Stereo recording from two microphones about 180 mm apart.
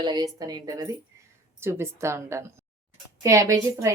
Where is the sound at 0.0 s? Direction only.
25° right (ahead or behind).